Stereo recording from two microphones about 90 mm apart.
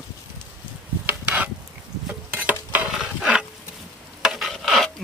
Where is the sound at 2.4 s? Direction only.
20° right (ahead or behind).